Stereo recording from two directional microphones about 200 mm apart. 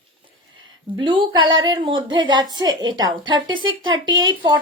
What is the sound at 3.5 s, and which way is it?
Speech, 75° right (ahead or behind).